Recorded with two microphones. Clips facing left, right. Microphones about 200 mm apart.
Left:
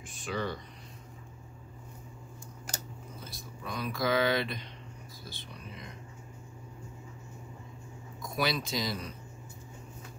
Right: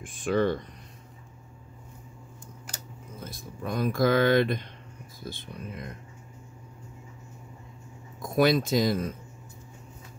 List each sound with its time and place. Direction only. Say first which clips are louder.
0.0 s speech: right 10 dB; 50° right (ahead or behind)
3.2 s speech: right 11 dB; 50° right (ahead or behind)
8.2 s speech: right 10 dB; 50° right (ahead or behind)